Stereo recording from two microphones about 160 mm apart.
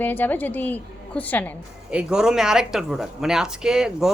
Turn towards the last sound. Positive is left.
turn(degrees=-5)  # may be behind; listen again after turning